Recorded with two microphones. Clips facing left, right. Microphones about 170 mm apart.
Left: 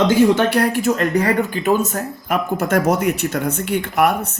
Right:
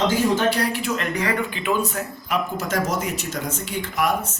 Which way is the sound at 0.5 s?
50° left (ahead or behind).